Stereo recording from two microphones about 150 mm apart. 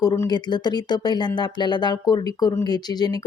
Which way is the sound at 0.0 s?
25° left (ahead or behind).